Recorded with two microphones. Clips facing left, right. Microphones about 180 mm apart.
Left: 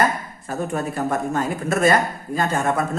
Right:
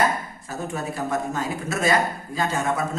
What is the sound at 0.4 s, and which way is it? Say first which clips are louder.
A man's voice: left 6 dB; 55° left (ahead or behind).